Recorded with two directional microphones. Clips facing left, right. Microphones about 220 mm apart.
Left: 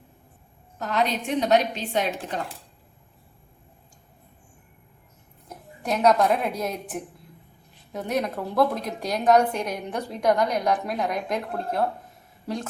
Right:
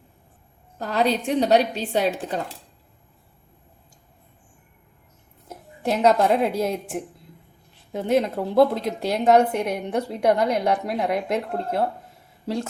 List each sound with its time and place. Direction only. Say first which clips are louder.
0.8 s a woman's voice: right 3 dB; 35° right (ahead or behind)
5.8 s a woman's voice: right 2 dB; 25° right (ahead or behind)
7.9 s a woman's voice: right 5 dB; 25° right (ahead or behind)